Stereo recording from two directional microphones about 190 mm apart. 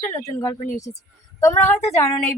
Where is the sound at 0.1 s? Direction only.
15° left (ahead or behind).